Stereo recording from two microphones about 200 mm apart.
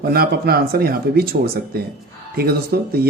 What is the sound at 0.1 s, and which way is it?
Speech, 50° right (ahead or behind).